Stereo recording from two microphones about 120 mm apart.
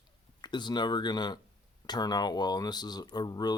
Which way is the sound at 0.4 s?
40° left (ahead or behind).